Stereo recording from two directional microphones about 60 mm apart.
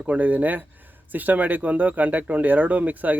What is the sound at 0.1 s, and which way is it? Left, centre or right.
Speech, right.